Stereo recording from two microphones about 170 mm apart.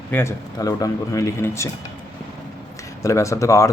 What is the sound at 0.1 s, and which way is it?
Speech, 15° left (ahead or behind).